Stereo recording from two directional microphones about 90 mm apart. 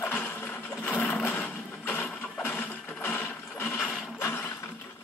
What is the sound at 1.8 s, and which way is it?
Mechanisms, 20° left (ahead or behind).